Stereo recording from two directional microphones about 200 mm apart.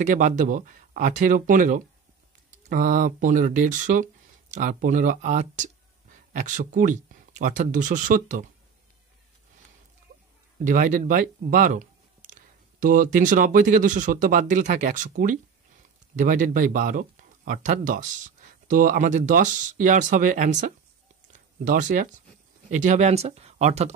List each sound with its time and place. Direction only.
0.0 s speech: 40° right (ahead or behind)
10.6 s speech: 40° right (ahead or behind)
21.3 s a sound: 40° right (ahead or behind)
22.7 s speech: 40° right (ahead or behind)